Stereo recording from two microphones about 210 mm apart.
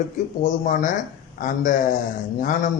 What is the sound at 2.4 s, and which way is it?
Speech, 40° left (ahead or behind).